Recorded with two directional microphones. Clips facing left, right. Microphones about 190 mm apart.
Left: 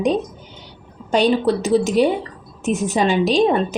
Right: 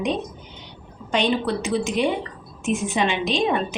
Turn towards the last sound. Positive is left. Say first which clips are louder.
# left 6 dB
turn(degrees=40)  # may be behind; listen again after turning